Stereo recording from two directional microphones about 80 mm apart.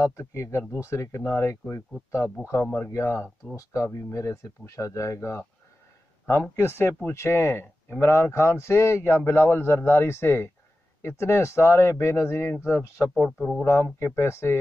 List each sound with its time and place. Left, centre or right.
0.2 s speech: left
6.5 s speech: left
13.1 s speech: centre
13.9 s speech: left